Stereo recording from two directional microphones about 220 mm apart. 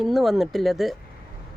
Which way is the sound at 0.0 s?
Centre (ahead or behind).